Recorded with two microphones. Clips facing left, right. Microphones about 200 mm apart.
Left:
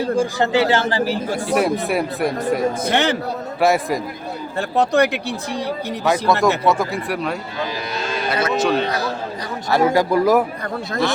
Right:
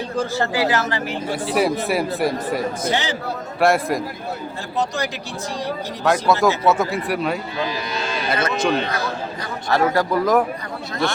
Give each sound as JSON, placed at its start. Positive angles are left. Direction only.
{"t": 0.2, "sound": "speech", "side_deg": 20}
{"t": 1.5, "sound": "speech", "side_deg": 0}
{"t": 2.8, "sound": "speech", "side_deg": 60}
{"t": 3.6, "sound": "speech", "side_deg": 0}
{"t": 4.7, "sound": "speech", "side_deg": 60}
{"t": 6.1, "sound": "speech", "side_deg": 0}
{"t": 9.6, "sound": "a man's voice", "side_deg": 10}